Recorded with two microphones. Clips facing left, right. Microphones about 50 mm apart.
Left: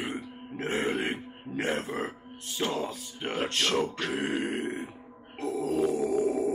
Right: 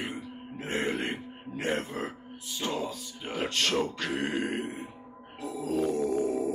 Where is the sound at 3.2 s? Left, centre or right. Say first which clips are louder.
Left 4 dB; left.